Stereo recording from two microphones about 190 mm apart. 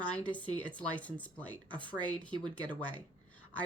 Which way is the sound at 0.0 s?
10° left (ahead or behind).